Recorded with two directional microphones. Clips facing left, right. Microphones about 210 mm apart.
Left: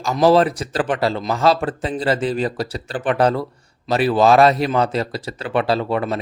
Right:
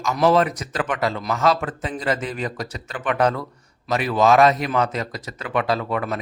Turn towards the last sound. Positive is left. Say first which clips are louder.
# left 4 dB
turn(degrees=30)  # may be behind; listen again after turning